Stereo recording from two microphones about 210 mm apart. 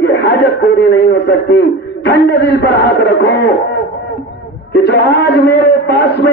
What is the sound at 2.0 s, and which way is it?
A man's voice, 50° left (ahead or behind).